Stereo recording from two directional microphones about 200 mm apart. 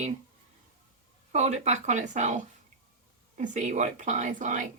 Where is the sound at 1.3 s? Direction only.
35° right (ahead or behind).